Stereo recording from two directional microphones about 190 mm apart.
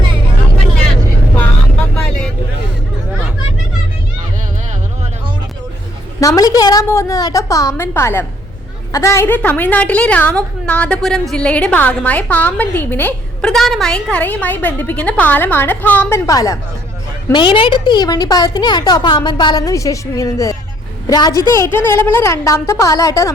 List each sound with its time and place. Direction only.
2.0 s vehicle: 5° left (ahead or behind)
6.1 s a woman's voice: 20° left (ahead or behind)